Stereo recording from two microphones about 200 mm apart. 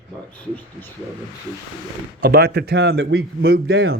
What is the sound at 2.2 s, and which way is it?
A man's voice, 50° right (ahead or behind).